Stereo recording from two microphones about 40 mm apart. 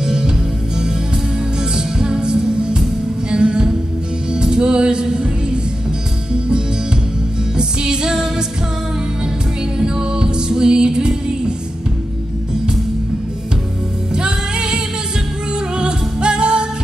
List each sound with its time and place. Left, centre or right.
0.0 s music: centre
1.6 s music: centre
7.5 s music: centre
9.8 s music: centre
14.1 s music: right
15.8 s music: right